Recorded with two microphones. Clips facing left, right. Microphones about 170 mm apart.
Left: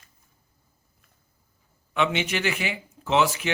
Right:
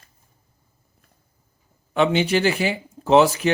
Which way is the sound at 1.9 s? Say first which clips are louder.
Right 7 dB; 35° right (ahead or behind).